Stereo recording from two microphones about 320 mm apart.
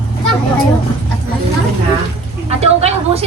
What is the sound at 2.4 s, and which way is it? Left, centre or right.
Speech, centre.